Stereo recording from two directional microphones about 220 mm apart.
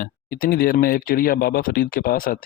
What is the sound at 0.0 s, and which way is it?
Speech, 40° left (ahead or behind).